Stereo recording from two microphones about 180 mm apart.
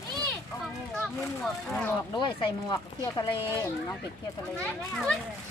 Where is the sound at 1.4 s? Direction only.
Centre (ahead or behind).